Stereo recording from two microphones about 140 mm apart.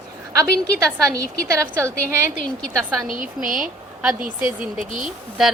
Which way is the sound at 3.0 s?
75° right (ahead or behind).